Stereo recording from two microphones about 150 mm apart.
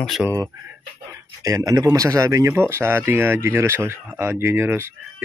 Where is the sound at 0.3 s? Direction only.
20° right (ahead or behind).